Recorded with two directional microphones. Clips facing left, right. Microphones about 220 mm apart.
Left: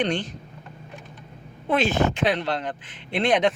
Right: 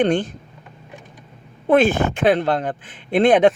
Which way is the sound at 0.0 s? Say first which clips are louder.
Right 7 dB; 50° right (ahead or behind).